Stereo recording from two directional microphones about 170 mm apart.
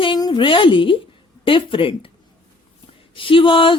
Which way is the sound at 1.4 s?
30° left (ahead or behind).